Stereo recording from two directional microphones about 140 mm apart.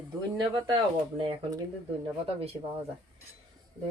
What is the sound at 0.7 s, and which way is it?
Speech, 35° right (ahead or behind).